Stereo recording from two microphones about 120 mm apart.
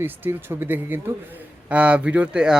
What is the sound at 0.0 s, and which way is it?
Speech, 20° right (ahead or behind).